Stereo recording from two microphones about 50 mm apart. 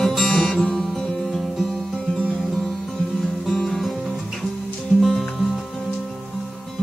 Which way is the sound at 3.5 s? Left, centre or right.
Centre.